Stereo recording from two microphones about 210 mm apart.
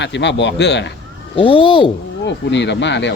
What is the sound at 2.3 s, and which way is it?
Speech, 55° left (ahead or behind).